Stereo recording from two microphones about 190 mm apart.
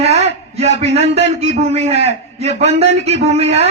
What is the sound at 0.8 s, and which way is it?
A man's voice, 35° right (ahead or behind).